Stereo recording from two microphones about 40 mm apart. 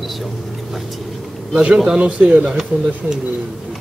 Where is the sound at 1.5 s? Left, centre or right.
Right.